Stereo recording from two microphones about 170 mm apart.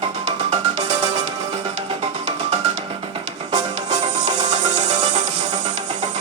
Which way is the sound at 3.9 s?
40° right (ahead or behind).